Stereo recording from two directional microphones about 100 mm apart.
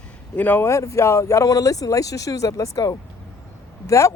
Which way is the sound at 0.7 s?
30° left (ahead or behind).